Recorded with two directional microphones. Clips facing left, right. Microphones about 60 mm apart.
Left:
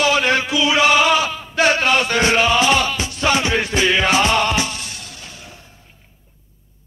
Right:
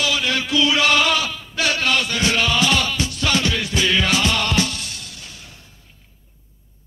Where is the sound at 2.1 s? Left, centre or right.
Left.